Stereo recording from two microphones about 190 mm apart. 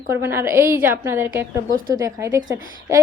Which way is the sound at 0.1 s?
10° right (ahead or behind).